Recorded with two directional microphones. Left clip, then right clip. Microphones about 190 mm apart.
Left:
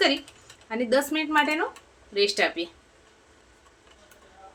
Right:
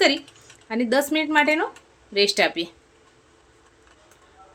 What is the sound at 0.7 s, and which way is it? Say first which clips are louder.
A woman's voice: right 2 dB; 40° right (ahead or behind).